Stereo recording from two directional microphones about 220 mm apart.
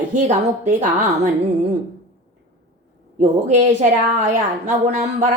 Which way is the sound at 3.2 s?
35° right (ahead or behind).